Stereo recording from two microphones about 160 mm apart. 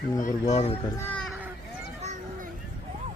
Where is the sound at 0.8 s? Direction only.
20° left (ahead or behind).